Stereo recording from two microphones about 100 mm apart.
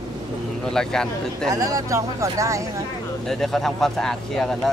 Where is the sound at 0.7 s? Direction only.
5° left (ahead or behind).